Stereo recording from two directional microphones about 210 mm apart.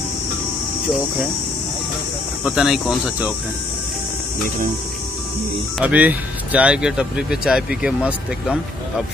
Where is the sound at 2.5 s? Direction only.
Centre (ahead or behind).